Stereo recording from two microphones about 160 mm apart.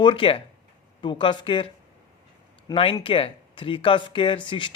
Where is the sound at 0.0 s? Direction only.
30° left (ahead or behind).